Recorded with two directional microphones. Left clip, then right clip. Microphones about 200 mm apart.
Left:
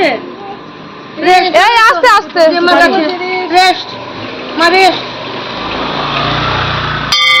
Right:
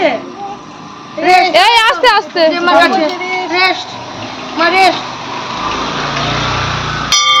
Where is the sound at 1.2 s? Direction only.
35° right (ahead or behind).